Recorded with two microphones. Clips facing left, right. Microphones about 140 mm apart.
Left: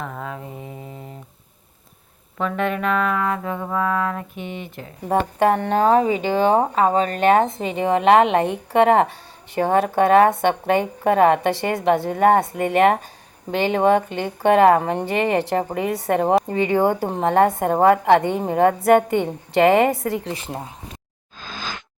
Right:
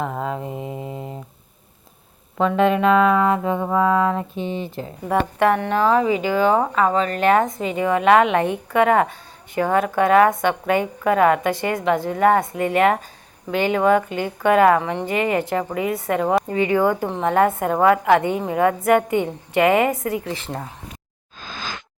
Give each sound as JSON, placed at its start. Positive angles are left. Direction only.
{"t": 0.0, "sound": "mantra", "side_deg": -30}
{"t": 0.7, "sound": "mantra", "side_deg": -15}
{"t": 2.6, "sound": "music", "side_deg": -30}
{"t": 5.0, "sound": "a woman's voice", "side_deg": 30}
{"t": 14.8, "sound": "a woman's voice", "side_deg": 40}
{"t": 20.2, "sound": "speech", "side_deg": 25}